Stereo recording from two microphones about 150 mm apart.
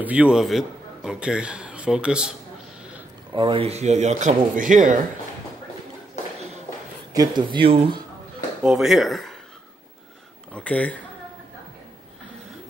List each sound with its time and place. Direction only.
0.0 s a man's voice: 10° right (ahead or behind)
3.3 s speech: 35° right (ahead or behind); by 4.9 s 60° right (ahead or behind)
7.2 s speech: 30° right (ahead or behind)
8.6 s speech: centre (ahead or behind)
10.5 s speech: 10° left (ahead or behind)